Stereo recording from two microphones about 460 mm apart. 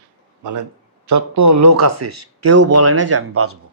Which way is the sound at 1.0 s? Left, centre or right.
Right.